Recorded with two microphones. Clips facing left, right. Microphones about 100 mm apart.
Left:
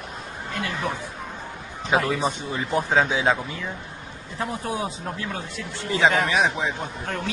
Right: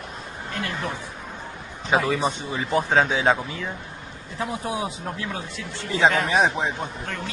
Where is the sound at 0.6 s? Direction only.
20° left (ahead or behind).